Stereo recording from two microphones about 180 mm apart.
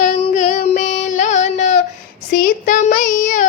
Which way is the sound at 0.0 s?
45° left (ahead or behind).